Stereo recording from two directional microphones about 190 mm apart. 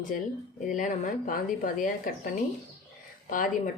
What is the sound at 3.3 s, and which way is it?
Speech, 45° left (ahead or behind).